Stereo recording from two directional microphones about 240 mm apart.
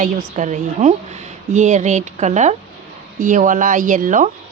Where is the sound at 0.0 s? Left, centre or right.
Right.